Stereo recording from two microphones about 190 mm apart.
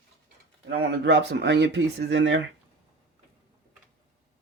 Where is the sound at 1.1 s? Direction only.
65° right (ahead or behind).